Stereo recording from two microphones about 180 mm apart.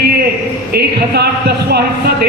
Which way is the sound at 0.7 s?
65° right (ahead or behind).